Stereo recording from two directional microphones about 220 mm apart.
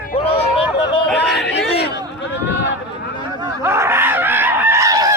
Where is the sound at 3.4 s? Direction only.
10° right (ahead or behind).